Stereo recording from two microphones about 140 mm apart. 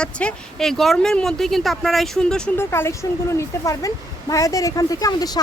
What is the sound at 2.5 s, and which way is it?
Speech, 15° left (ahead or behind).